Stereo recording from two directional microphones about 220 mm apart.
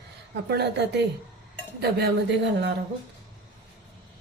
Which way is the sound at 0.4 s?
50° right (ahead or behind).